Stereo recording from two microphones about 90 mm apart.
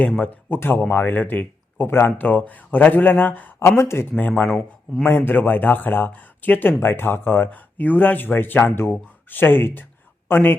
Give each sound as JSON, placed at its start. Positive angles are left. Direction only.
{"t": 0.2, "sound": "speech", "side_deg": 20}
{"t": 3.8, "sound": "speech", "side_deg": 30}
{"t": 4.2, "sound": "speech", "side_deg": 20}
{"t": 4.4, "sound": "speech", "side_deg": 0}
{"t": 5.0, "sound": "speech", "side_deg": 25}